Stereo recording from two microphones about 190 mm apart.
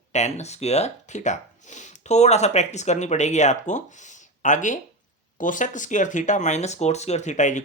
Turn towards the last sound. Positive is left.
turn(degrees=40)  # may be behind; listen again after turning